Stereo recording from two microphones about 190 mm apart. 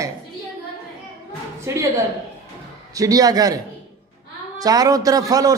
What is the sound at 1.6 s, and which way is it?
Speech, 15° right (ahead or behind).